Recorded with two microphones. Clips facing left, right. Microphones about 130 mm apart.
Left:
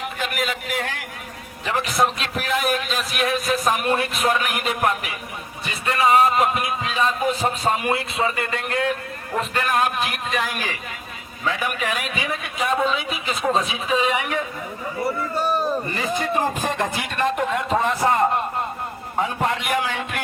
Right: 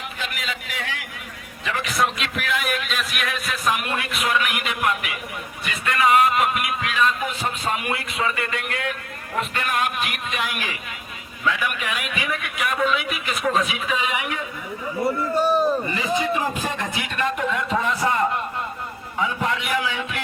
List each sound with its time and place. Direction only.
0.2 s a sound: 50° left (ahead or behind)
1.6 s a man's voice: 35° left (ahead or behind)
16.1 s speech: 45° left (ahead or behind)